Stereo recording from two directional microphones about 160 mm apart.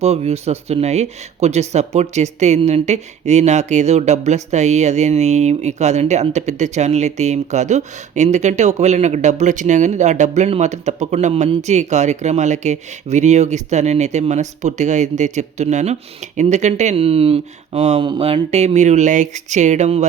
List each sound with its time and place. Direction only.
0.0 s speech: 40° right (ahead or behind)